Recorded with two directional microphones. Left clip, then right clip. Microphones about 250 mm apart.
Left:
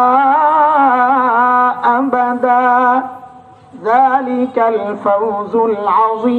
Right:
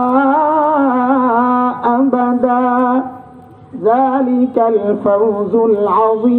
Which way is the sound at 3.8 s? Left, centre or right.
Left.